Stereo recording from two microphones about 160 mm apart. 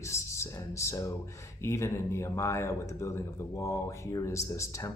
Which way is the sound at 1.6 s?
15° left (ahead or behind).